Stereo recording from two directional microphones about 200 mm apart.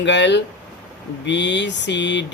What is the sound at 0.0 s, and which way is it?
Speech, 65° left (ahead or behind).